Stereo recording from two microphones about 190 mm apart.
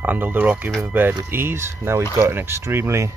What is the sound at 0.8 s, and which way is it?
Speech, 10° right (ahead or behind).